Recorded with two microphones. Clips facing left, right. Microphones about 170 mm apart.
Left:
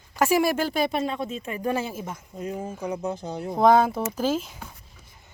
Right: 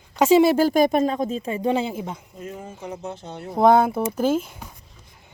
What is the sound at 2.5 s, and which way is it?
Speech, 35° left (ahead or behind).